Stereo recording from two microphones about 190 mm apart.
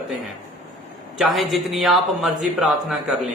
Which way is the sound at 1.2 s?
Centre (ahead or behind).